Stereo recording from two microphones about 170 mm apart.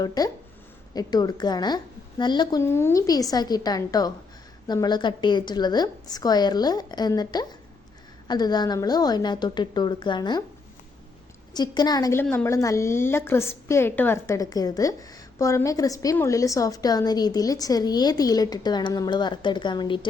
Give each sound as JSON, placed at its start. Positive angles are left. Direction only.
{"t": 0.0, "sound": "a woman's voice", "side_deg": 25}
{"t": 11.5, "sound": "a woman's voice", "side_deg": 25}
{"t": 12.2, "sound": "a woman's voice", "side_deg": 10}